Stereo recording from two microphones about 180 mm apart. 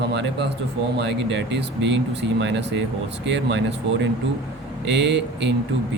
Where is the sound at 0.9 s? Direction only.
75° right (ahead or behind).